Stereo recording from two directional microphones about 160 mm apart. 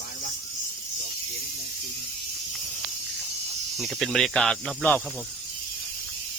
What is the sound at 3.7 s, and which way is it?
Speech, centre (ahead or behind).